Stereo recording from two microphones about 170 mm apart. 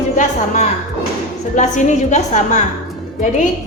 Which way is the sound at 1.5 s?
45° left (ahead or behind).